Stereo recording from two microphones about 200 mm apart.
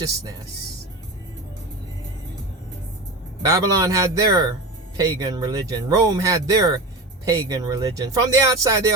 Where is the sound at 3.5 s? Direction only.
15° right (ahead or behind).